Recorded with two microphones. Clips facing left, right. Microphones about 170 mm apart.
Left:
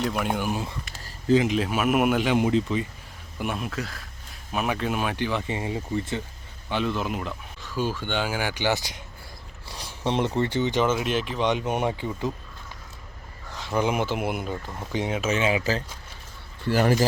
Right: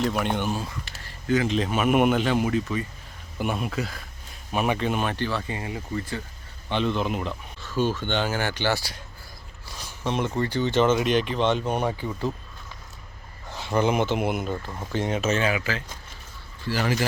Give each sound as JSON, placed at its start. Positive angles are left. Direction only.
{"t": 0.0, "sound": "speech", "side_deg": 0}
{"t": 0.5, "sound": "speech", "side_deg": 20}
{"t": 1.5, "sound": "speech", "side_deg": 5}
{"t": 3.3, "sound": "speech", "side_deg": 0}
{"t": 6.7, "sound": "speech", "side_deg": 5}
{"t": 11.4, "sound": "speech", "side_deg": 15}
{"t": 13.7, "sound": "speech", "side_deg": 10}
{"t": 16.6, "sound": "speech", "side_deg": 50}